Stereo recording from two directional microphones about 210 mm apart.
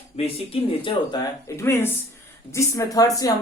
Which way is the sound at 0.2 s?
25° left (ahead or behind).